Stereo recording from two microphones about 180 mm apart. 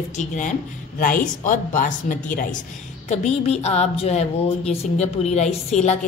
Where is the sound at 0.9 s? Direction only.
50° left (ahead or behind).